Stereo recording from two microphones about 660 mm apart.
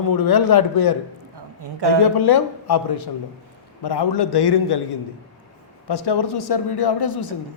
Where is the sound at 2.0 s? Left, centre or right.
Left.